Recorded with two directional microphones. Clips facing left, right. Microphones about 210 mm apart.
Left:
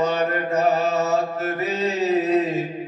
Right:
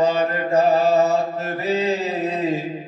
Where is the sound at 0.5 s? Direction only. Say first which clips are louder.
Right 6 dB; 30° right (ahead or behind).